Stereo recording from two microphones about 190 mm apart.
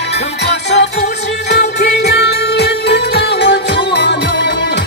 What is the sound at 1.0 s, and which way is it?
Music, 60° left (ahead or behind).